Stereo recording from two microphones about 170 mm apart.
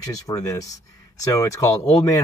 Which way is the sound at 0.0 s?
20° left (ahead or behind).